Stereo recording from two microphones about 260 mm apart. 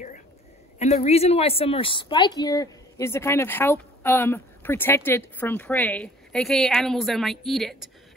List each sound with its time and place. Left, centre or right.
0.7 s a woman's voice: left; by 7.9 s centre